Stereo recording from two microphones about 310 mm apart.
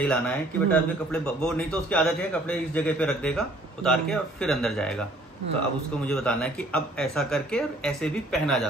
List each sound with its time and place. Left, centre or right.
0.0 s a man's voice: centre
6.0 s a man's voice: centre